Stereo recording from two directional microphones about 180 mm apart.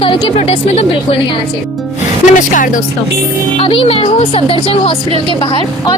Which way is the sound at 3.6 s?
30° left (ahead or behind).